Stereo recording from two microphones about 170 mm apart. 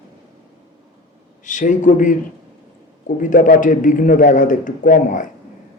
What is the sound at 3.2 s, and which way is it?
A man's voice, 50° left (ahead or behind).